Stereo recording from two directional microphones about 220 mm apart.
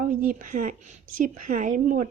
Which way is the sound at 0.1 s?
35° right (ahead or behind).